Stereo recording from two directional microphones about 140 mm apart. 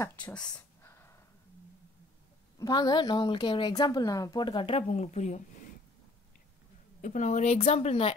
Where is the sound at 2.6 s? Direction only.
30° left (ahead or behind); by 5.4 s 55° left (ahead or behind).